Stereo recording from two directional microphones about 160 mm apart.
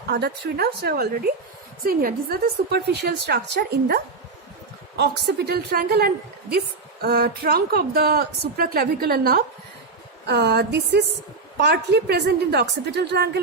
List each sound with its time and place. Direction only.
0.1 s a woman's voice: 90° right
1.8 s a woman's voice: 65° right (ahead or behind)
10.2 s a woman's voice: 90° right